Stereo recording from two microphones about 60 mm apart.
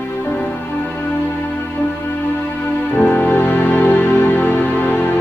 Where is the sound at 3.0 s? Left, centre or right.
Left.